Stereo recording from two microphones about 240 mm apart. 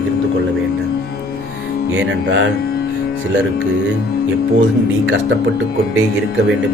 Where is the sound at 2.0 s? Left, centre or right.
Right.